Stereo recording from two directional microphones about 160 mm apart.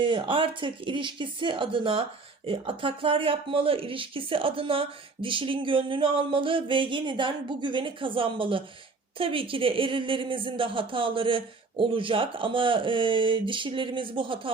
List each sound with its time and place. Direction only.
0.0 s speech: 30° right (ahead or behind)